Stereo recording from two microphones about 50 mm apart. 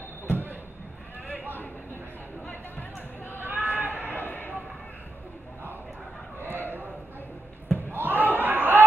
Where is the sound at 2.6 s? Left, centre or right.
Left.